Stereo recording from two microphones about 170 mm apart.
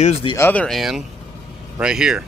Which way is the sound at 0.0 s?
40° left (ahead or behind).